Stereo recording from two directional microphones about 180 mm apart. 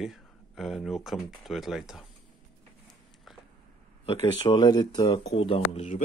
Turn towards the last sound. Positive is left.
turn(degrees=40)  # may be behind; listen again after turning